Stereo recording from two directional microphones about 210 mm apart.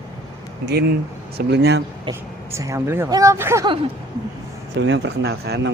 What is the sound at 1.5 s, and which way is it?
Speech, 55° right (ahead or behind).